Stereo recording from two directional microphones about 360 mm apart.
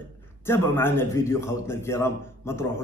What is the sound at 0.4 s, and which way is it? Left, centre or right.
A man's voice, centre.